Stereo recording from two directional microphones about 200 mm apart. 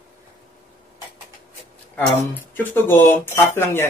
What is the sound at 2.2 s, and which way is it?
Speech, 10° left (ahead or behind).